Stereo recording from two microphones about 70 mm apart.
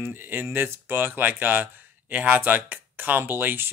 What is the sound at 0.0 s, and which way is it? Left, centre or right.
Speech, right.